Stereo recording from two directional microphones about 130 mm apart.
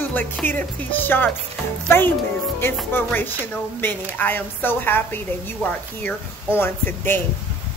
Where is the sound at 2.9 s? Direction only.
15° left (ahead or behind).